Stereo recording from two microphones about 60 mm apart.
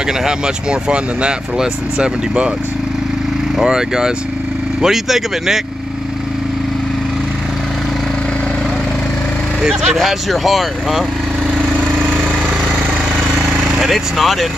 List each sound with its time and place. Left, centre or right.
0.2 s speech: centre
3.5 s speech: centre
9.9 s speech: centre
13.5 s speech: centre